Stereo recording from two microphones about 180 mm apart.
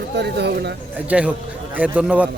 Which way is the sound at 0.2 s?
65° right (ahead or behind).